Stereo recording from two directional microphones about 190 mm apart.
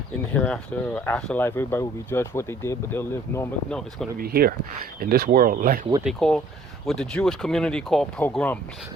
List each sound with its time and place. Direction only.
0.3 s speech: 5° left (ahead or behind)
4.2 s speech: 55° right (ahead or behind)
6.1 s speech: 5° left (ahead or behind)